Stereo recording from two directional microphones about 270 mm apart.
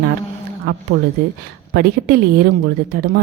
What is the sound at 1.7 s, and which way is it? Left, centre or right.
Speech, right.